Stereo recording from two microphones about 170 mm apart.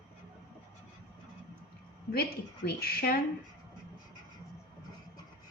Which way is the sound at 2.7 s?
65° left (ahead or behind).